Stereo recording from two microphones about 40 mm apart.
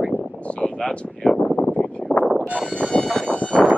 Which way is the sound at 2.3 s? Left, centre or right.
Right.